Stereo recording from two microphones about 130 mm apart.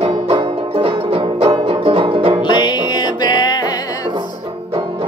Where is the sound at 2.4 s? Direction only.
35° left (ahead or behind).